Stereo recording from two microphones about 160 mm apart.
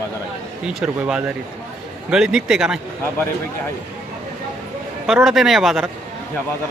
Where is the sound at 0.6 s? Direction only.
5° right (ahead or behind).